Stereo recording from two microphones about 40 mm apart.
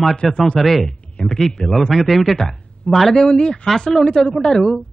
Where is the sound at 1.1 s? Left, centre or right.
Left.